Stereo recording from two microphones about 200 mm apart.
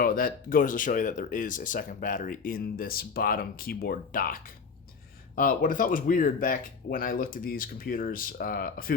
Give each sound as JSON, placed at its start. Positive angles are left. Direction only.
{"t": 0.0, "sound": "speech", "side_deg": 45}